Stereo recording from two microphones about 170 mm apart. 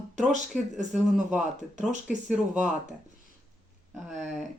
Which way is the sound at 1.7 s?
45° right (ahead or behind).